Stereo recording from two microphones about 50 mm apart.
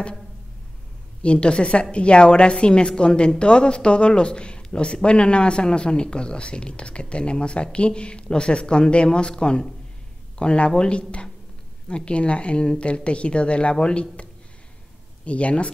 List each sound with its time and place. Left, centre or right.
1.2 s a woman's voice: left